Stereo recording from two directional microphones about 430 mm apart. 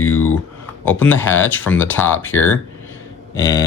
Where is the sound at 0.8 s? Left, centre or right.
Centre.